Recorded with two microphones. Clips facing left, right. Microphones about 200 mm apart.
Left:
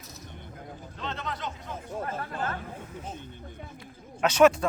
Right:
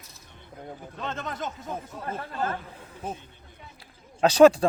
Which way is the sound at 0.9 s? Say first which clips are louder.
Right 2 dB; 50° right (ahead or behind).